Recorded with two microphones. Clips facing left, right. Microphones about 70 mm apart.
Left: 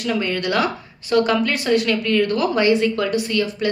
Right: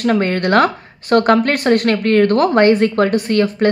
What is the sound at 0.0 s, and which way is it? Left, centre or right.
Speech, right.